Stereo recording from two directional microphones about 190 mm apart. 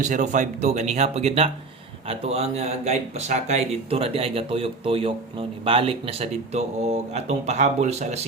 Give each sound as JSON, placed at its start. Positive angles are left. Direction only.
{"t": 0.0, "sound": "speech", "side_deg": -40}